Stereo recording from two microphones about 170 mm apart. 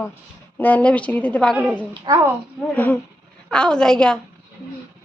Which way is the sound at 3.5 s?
5° left (ahead or behind).